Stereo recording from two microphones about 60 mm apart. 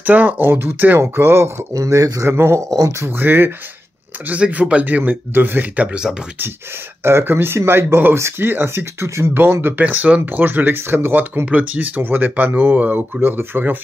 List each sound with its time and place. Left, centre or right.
0.0 s speech: right
1.7 s speech: right
2.2 s speech: right
2.7 s speech: right
3.1 s speech: right
4.3 s speech: right
7.0 s speech: right
9.3 s speech: right
11.4 s speech: right